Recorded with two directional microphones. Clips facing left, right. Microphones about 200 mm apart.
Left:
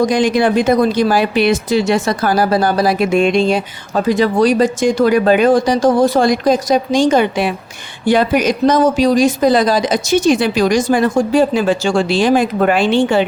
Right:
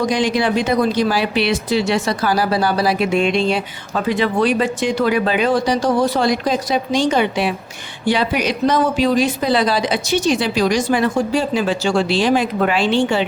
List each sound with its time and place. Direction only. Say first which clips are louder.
0.0 s speech: left 4 dB; 50° left (ahead or behind)